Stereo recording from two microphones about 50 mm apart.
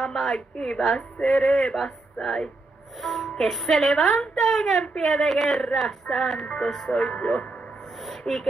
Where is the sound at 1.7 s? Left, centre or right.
Centre.